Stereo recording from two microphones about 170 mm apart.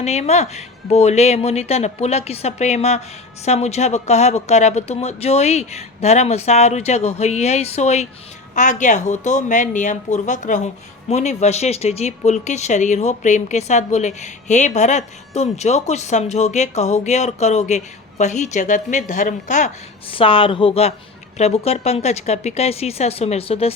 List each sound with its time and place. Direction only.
0.0 s speech: 40° left (ahead or behind)
20.1 s speech: 30° left (ahead or behind)